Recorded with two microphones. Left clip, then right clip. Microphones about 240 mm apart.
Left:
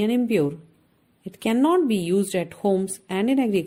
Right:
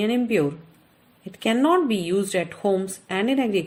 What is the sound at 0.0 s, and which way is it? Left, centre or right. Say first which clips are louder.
Speech: even; left.